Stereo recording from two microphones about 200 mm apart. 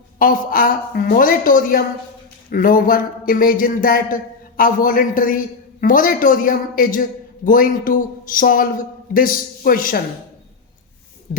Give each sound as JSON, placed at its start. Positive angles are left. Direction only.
{"t": 0.2, "sound": "a man's voice", "side_deg": 45}